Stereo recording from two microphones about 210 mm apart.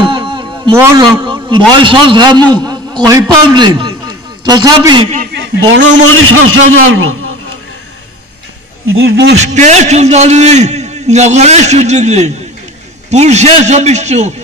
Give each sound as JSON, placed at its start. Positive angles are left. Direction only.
{"t": 0.0, "sound": "a sound", "side_deg": -25}
{"t": 1.2, "sound": "a man's voice", "side_deg": -25}
{"t": 5.7, "sound": "a man's voice", "side_deg": -60}
{"t": 8.8, "sound": "speech", "side_deg": -70}
{"t": 9.4, "sound": "a man's voice", "side_deg": -35}